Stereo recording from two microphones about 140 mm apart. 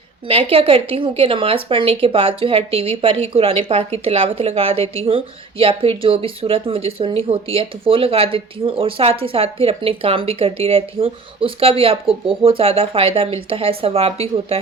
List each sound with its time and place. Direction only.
0.3 s speech: 45° right (ahead or behind)